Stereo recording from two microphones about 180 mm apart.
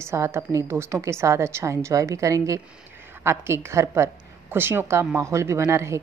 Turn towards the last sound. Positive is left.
turn(degrees=-15)  # may be behind; listen again after turning